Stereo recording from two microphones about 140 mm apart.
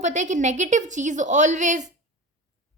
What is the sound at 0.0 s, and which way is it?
A woman's voice, 55° right (ahead or behind).